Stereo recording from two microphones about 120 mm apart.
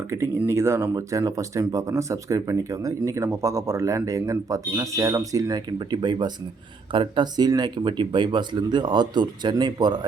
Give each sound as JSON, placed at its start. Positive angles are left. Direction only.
{"t": 0.1, "sound": "speech", "side_deg": -20}